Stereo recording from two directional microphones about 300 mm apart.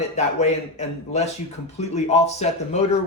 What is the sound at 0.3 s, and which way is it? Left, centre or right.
Speech, left.